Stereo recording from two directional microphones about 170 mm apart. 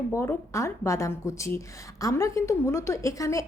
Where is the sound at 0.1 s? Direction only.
15° left (ahead or behind).